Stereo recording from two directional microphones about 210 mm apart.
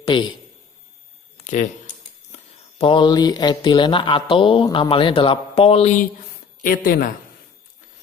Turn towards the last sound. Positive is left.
turn(degrees=40)  # may be behind; listen again after turning